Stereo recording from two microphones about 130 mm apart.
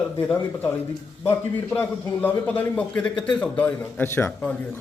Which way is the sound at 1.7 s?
15° left (ahead or behind).